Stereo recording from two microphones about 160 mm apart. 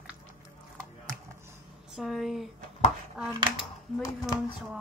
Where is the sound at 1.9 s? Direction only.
Centre (ahead or behind).